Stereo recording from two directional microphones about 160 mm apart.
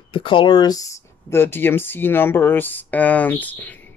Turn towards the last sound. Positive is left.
turn(degrees=10)  # may be behind; listen again after turning